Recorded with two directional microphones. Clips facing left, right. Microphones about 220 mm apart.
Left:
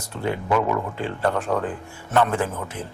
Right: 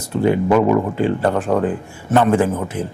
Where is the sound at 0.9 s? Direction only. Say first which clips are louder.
Right 7 dB; 10° right (ahead or behind).